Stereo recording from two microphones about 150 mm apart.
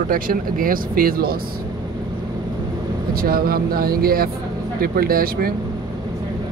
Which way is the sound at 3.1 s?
75° right (ahead or behind).